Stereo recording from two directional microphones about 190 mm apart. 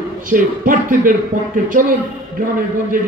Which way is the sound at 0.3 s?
45° right (ahead or behind).